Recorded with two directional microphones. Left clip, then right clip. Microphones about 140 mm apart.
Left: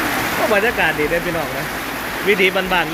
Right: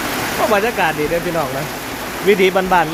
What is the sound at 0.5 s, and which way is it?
Speech, 15° right (ahead or behind).